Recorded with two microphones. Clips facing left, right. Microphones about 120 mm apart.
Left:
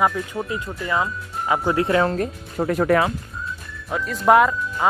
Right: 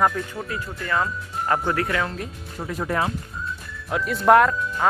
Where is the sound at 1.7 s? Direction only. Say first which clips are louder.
Left 6 dB; 25° left (ahead or behind).